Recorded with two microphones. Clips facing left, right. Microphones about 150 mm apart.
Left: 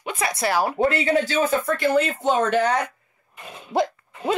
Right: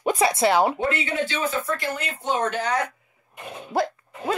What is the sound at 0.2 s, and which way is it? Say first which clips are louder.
Speech: right 2 dB; 20° right (ahead or behind).